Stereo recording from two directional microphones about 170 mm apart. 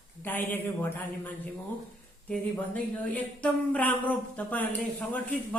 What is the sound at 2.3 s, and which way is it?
Speech, 10° left (ahead or behind).